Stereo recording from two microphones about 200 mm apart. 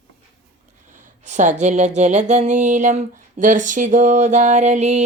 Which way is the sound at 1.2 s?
35° right (ahead or behind).